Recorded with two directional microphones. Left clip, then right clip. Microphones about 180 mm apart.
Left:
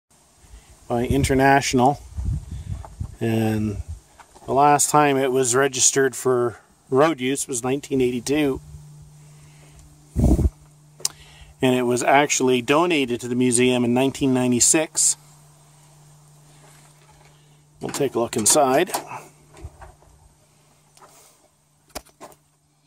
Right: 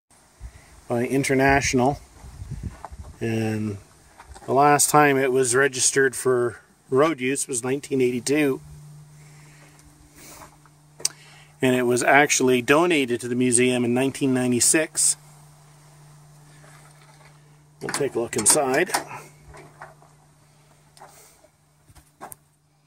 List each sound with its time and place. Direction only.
0.8 s speech: 20° left (ahead or behind)
3.2 s speech: 25° left (ahead or behind)
4.6 s speech: centre (ahead or behind)
4.9 s speech: 10° left (ahead or behind)
11.6 s speech: 20° left (ahead or behind)
13.1 s speech: 20° left (ahead or behind)
17.7 s speech: 35° left (ahead or behind)
19.0 s drawer open or close: 20° left (ahead or behind)